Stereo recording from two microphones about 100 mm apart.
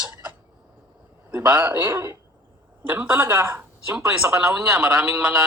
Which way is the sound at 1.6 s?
20° right (ahead or behind).